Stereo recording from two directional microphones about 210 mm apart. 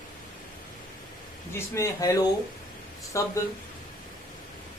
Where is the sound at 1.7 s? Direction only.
15° left (ahead or behind).